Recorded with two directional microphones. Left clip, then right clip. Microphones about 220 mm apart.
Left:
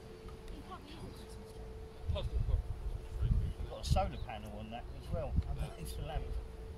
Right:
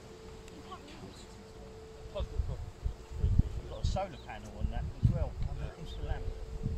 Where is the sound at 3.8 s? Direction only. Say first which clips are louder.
Left 1 dB; 45° left (ahead or behind).